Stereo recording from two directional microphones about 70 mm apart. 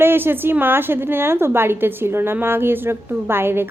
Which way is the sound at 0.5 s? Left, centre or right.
Right.